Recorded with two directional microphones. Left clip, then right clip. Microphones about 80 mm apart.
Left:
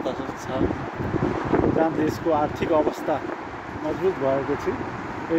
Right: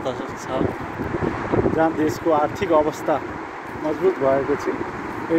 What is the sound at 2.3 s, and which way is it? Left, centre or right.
Speech, left.